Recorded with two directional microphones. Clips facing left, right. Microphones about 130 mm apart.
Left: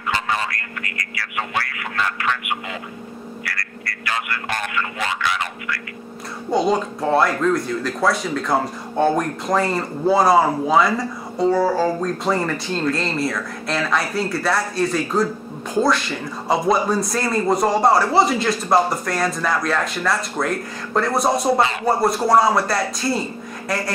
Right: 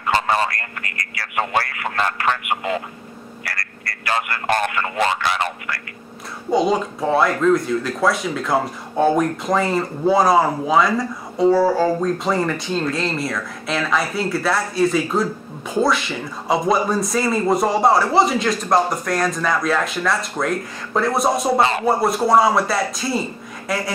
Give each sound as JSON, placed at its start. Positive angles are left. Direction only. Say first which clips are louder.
{"t": 0.0, "sound": "a man's voice", "louder": "right 4 dB", "side_deg": -40}
{"t": 6.5, "sound": "speech", "louder": "right 1 dB", "side_deg": 0}